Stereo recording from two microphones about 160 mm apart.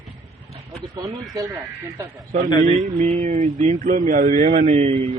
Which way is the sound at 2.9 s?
50° right (ahead or behind).